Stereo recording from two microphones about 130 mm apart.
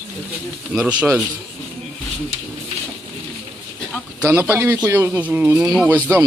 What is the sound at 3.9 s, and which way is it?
Speech, 10° right (ahead or behind).